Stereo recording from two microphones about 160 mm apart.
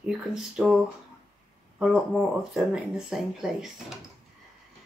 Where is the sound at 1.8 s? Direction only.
Centre (ahead or behind).